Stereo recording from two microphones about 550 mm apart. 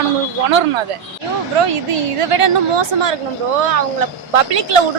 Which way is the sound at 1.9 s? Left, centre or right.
Right.